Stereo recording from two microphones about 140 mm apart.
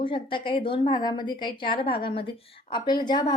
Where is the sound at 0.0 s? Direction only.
35° left (ahead or behind).